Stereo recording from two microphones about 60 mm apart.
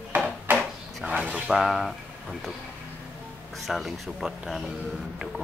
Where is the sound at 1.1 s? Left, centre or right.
Right.